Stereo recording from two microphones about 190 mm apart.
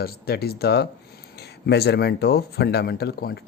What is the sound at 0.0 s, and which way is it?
Speech, 55° left (ahead or behind).